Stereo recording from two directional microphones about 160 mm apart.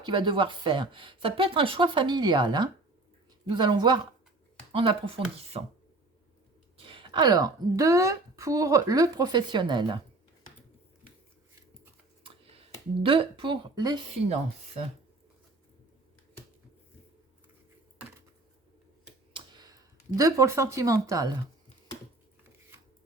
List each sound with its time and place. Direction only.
0.0 s a woman's voice: 30° right (ahead or behind)
6.7 s a woman's voice: 35° right (ahead or behind)
12.2 s speech: 35° right (ahead or behind)
19.3 s speech: 25° right (ahead or behind)